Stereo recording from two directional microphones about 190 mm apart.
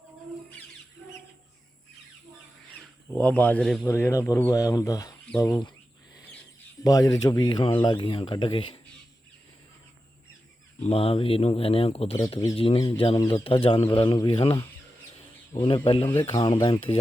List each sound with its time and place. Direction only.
3.1 s speech: 5° left (ahead or behind)
6.8 s speech: 20° left (ahead or behind)
10.8 s speech: 30° left (ahead or behind)